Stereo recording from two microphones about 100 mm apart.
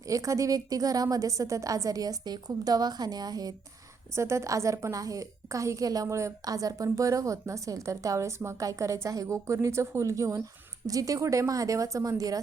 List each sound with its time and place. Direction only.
0.0 s a woman's voice: 35° right (ahead or behind)
4.1 s a woman's voice: 30° right (ahead or behind)